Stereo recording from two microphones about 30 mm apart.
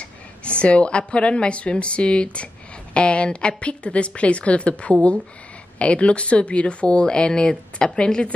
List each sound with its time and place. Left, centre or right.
0.0 s a woman's voice: left